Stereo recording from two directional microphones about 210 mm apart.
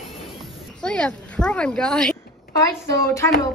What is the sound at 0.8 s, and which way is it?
Speech, 5° left (ahead or behind).